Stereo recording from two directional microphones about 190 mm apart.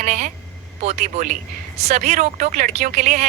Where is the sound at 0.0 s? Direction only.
40° right (ahead or behind).